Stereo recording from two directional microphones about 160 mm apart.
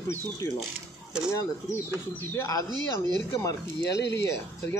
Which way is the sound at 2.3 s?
20° left (ahead or behind).